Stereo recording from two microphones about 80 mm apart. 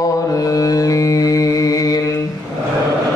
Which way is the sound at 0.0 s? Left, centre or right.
Left.